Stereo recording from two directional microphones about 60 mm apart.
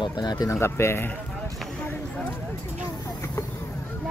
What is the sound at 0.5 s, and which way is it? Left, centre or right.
Speech, left.